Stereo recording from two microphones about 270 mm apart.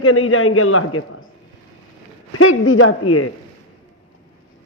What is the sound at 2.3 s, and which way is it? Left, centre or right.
Speech, left.